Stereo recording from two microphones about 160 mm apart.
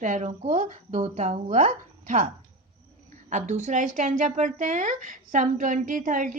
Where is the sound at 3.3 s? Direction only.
50° right (ahead or behind).